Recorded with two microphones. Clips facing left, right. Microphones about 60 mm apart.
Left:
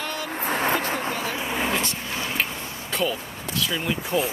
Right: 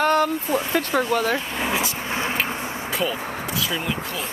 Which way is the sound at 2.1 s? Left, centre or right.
Right.